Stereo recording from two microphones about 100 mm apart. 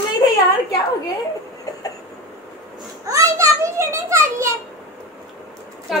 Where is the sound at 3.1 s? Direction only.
30° right (ahead or behind).